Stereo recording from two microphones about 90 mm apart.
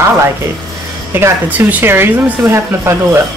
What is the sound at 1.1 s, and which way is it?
Speech, 25° right (ahead or behind).